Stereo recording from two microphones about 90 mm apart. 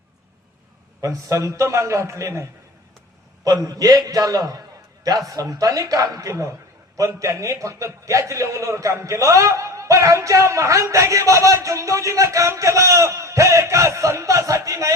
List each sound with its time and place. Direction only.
1.0 s a man's voice: 35° right (ahead or behind)